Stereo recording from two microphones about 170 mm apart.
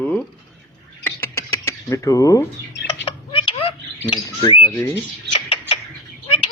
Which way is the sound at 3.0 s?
30° left (ahead or behind).